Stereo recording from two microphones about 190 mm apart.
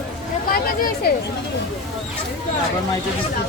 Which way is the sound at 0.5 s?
50° left (ahead or behind).